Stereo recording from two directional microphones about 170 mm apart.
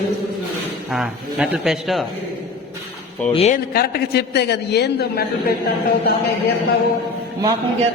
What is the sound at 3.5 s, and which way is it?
A man's voice, 65° left (ahead or behind).